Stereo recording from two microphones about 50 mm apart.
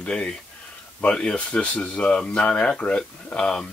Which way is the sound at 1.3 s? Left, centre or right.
Left.